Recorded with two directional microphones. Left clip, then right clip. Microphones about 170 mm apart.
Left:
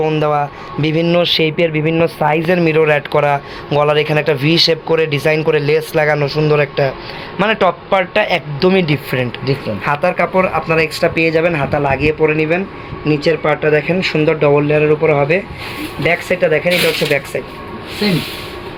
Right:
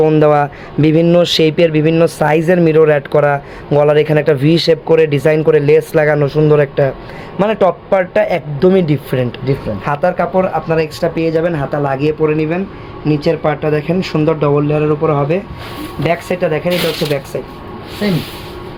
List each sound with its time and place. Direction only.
0.0 s a man's voice: 50° right (ahead or behind)
16.0 s speech: 60° right (ahead or behind)